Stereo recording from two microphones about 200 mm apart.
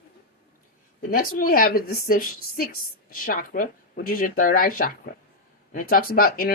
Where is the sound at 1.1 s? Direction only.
45° left (ahead or behind).